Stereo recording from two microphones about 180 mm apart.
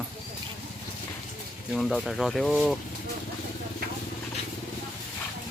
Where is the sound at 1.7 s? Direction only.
Centre (ahead or behind).